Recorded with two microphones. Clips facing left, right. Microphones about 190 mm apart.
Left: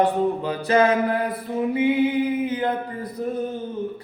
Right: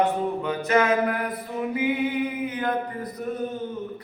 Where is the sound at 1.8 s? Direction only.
30° left (ahead or behind).